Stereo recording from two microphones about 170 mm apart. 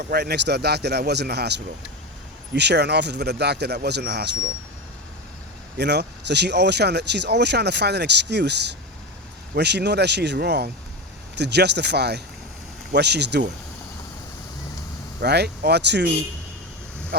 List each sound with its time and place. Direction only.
0.1 s a man's voice: 75° right (ahead or behind)
5.7 s a man's voice: 80° right
15.2 s a man's voice: 75° right (ahead or behind)